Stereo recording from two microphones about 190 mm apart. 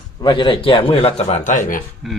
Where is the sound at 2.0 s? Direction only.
Centre (ahead or behind).